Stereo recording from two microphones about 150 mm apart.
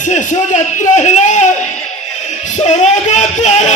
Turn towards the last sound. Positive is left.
turn(degrees=50)  # may be behind; listen again after turning